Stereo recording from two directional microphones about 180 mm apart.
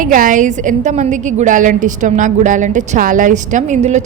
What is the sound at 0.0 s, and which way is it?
A woman's voice, 50° right (ahead or behind).